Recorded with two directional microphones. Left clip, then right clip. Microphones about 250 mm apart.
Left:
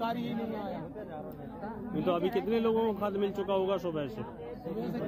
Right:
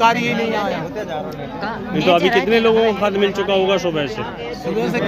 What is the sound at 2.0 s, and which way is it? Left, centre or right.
Speech, centre.